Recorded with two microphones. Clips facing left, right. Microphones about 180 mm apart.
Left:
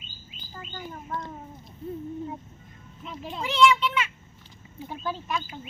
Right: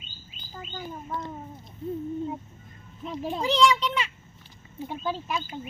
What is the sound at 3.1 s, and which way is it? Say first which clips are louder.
A child's voice: right 6 dB; 35° right (ahead or behind).